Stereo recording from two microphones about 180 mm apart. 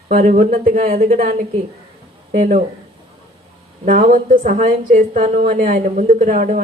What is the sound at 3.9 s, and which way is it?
A woman's voice, 50° right (ahead or behind).